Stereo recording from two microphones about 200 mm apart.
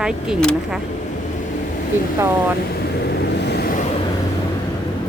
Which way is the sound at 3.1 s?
55° left (ahead or behind).